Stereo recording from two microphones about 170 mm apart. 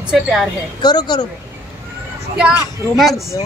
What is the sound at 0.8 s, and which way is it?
Speech, 25° left (ahead or behind).